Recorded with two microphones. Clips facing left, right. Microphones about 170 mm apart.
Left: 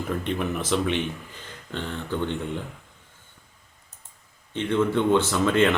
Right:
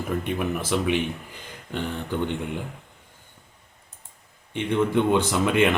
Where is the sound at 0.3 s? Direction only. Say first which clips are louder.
Left 2 dB; 10° right (ahead or behind).